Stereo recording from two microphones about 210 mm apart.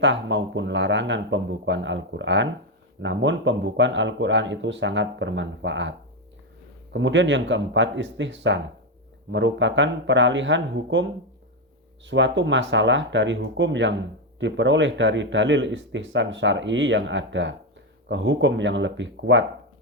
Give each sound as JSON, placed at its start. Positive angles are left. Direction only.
{"t": 0.0, "sound": "speech", "side_deg": -60}
{"t": 6.9, "sound": "speech", "side_deg": -60}
{"t": 12.0, "sound": "speech", "side_deg": -60}